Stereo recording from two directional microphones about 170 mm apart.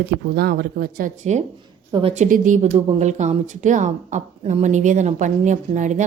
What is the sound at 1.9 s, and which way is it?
Speech, 35° right (ahead or behind).